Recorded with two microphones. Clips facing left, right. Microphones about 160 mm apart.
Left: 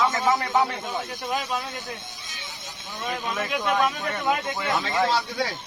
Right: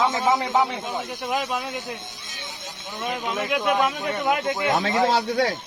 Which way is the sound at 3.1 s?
10° right (ahead or behind).